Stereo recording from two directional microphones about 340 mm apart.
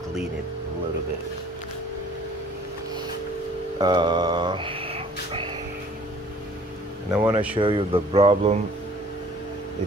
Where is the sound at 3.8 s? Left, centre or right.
Centre.